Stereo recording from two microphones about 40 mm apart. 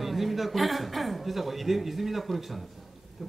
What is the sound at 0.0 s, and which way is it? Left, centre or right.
A man's voice, centre.